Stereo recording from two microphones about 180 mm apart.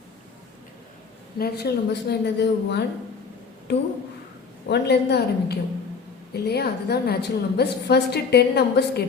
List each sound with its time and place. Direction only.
1.4 s a woman's voice: 65° left (ahead or behind)